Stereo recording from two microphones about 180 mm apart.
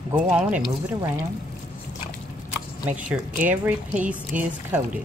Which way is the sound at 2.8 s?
5° right (ahead or behind).